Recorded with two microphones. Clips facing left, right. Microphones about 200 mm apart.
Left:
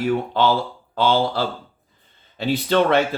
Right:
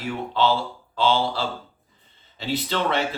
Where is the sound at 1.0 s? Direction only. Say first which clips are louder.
Left 3 dB; 50° left (ahead or behind).